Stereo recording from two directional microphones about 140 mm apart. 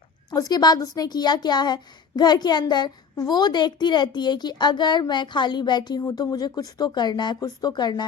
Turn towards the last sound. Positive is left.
turn(degrees=30)  # may be behind; listen again after turning